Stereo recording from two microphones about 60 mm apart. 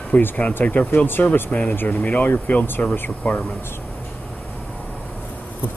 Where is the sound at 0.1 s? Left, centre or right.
Left.